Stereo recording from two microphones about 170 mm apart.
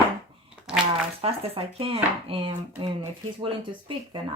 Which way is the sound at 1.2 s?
35° right (ahead or behind).